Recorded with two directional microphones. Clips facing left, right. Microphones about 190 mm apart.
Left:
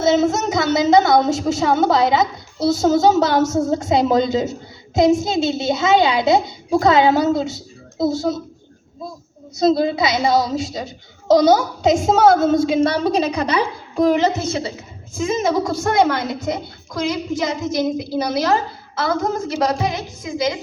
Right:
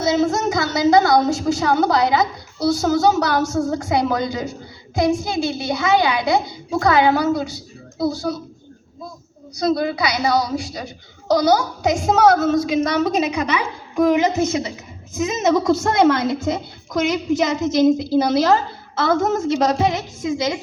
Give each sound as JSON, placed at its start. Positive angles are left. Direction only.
{"t": 0.0, "sound": "a woman's voice", "side_deg": 25}
{"t": 9.6, "sound": "a woman's voice", "side_deg": 25}
{"t": 15.1, "sound": "a woman's voice", "side_deg": -20}